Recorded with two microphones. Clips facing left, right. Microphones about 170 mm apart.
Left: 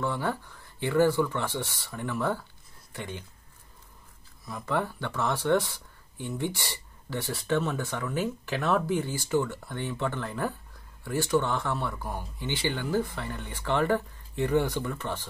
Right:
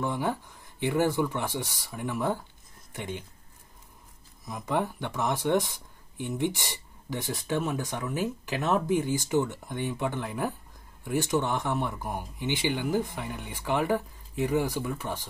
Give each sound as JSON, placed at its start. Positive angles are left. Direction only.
{"t": 0.0, "sound": "speech", "side_deg": -15}
{"t": 4.5, "sound": "speech", "side_deg": -15}